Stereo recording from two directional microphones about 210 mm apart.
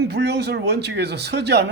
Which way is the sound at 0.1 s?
50° right (ahead or behind).